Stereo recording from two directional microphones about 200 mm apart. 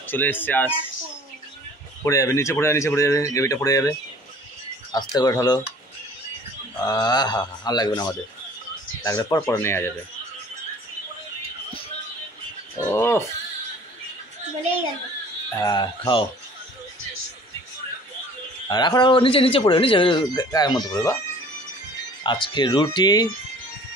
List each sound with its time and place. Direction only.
0.0 s speech: 10° left (ahead or behind)
2.0 s speech: 15° left (ahead or behind)
4.9 s speech: 20° left (ahead or behind)
6.8 s speech: 20° left (ahead or behind)
12.7 s speech: 15° left (ahead or behind)
15.5 s speech: 20° left (ahead or behind)
18.7 s speech: 20° left (ahead or behind)
22.2 s speech: 25° left (ahead or behind)